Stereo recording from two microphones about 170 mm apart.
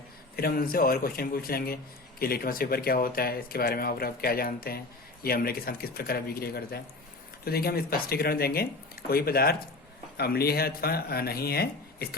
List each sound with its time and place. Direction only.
0.3 s a man's voice: 60° left (ahead or behind)